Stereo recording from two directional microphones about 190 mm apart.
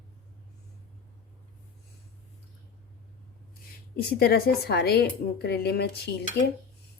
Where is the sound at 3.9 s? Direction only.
55° left (ahead or behind).